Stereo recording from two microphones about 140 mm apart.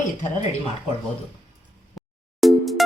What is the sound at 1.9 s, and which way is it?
Music, centre (ahead or behind).